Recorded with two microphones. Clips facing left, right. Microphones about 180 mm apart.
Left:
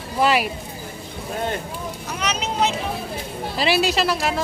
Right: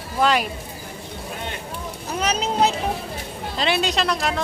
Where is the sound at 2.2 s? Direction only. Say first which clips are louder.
Right 3 dB; 35° right (ahead or behind).